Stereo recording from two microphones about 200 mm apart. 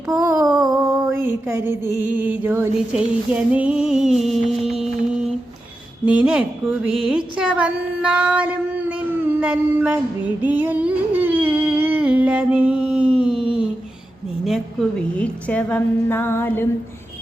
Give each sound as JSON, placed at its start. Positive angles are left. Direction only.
{"t": 0.2, "sound": "a sound", "side_deg": -15}
{"t": 0.5, "sound": "mantra", "side_deg": -20}
{"t": 2.0, "sound": "music", "side_deg": -10}
{"t": 6.1, "sound": "a woman's voice", "side_deg": -5}